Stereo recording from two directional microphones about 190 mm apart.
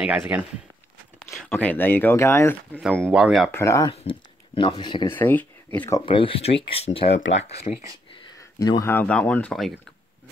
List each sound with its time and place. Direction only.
0.3 s speech: 10° right (ahead or behind); by 2.8 s 15° left (ahead or behind)
2.8 s speech: centre (ahead or behind)
3.5 s speech: 15° left (ahead or behind)
3.9 s speech: 30° left (ahead or behind)
5.1 s speech: 10° left (ahead or behind)
6.0 s speech: 25° left (ahead or behind)
8.5 s speech: 20° left (ahead or behind); by 9.8 s centre (ahead or behind)